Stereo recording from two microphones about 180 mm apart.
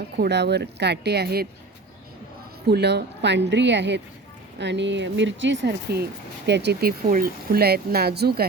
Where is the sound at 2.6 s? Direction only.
65° right (ahead or behind).